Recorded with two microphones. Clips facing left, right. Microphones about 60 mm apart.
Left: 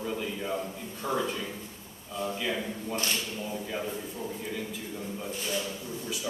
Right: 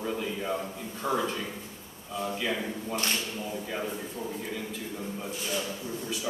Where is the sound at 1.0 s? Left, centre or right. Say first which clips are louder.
Right 1 dB; centre.